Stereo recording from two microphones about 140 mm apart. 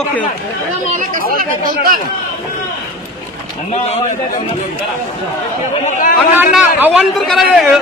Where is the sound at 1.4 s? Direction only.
90° right.